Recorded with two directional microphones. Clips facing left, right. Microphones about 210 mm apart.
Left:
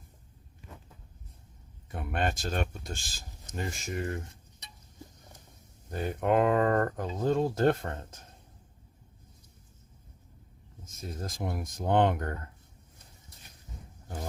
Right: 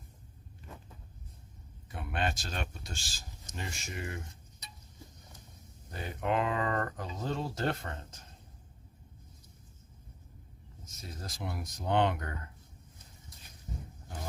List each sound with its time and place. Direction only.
1.9 s speech: 45° left (ahead or behind)
5.9 s speech: 45° left (ahead or behind)
10.8 s speech: 50° left (ahead or behind)